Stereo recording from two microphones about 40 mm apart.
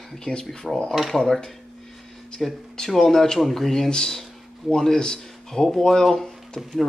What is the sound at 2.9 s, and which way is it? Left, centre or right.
A man's voice, centre.